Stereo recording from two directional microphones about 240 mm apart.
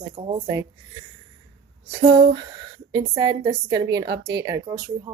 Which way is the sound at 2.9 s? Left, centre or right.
Centre.